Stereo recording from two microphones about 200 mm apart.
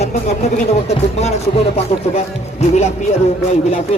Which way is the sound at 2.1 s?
35° left (ahead or behind).